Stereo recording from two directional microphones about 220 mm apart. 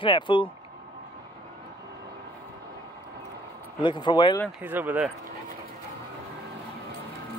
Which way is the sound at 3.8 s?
20° left (ahead or behind).